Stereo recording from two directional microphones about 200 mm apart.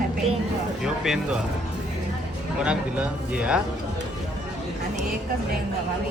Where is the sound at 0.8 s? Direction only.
Centre (ahead or behind).